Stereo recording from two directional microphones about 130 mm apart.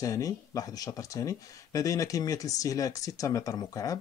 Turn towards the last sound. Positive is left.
turn(degrees=25)  # may be behind; listen again after turning